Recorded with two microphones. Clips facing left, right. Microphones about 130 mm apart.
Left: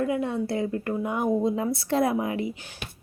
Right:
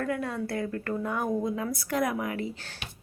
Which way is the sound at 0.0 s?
20° left (ahead or behind).